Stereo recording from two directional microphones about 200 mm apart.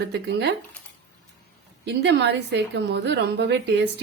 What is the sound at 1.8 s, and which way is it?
A woman's voice, 60° right (ahead or behind).